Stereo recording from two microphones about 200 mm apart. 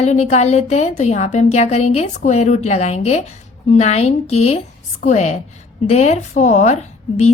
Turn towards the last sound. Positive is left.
turn(degrees=35)  # may be behind; listen again after turning